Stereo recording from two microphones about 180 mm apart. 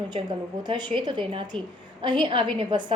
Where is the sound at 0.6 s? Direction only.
25° right (ahead or behind).